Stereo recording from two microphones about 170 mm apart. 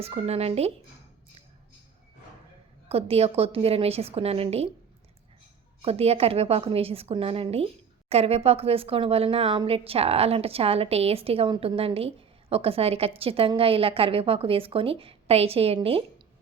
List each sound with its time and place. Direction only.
0.0 s a woman's voice: 35° right (ahead or behind)
2.9 s a woman's voice: 35° right (ahead or behind)
5.8 s a woman's voice: 35° right (ahead or behind)